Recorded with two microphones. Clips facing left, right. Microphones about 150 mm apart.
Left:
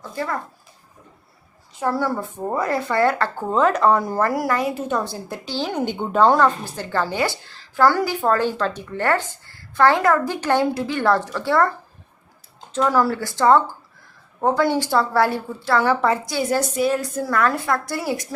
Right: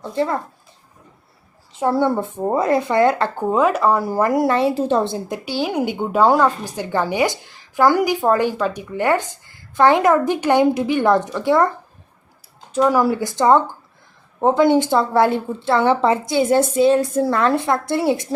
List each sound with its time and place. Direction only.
0.0 s a woman's voice: 25° right (ahead or behind)
1.8 s a woman's voice: 25° right (ahead or behind)
5.5 s speech: 10° right (ahead or behind)
12.7 s a woman's voice: 15° right (ahead or behind)